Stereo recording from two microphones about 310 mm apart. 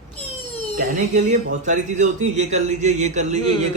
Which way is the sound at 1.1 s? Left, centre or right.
Right.